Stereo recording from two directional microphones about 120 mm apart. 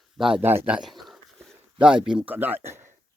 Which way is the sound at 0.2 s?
5° right (ahead or behind).